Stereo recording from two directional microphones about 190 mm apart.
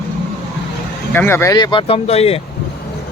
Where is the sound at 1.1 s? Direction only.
15° left (ahead or behind); by 2.4 s 30° left (ahead or behind).